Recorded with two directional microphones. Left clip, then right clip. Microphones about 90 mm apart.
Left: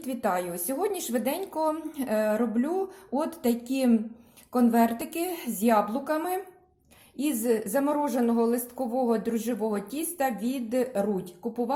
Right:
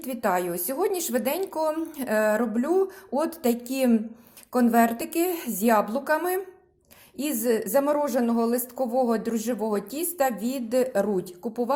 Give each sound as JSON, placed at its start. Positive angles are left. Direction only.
{"t": 0.0, "sound": "a woman's voice", "side_deg": -30}